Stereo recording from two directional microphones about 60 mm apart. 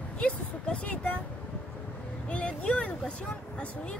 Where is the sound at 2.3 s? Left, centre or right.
Centre.